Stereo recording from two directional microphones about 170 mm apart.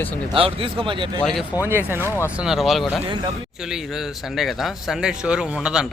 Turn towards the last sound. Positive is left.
turn(degrees=-5)  # may be behind; listen again after turning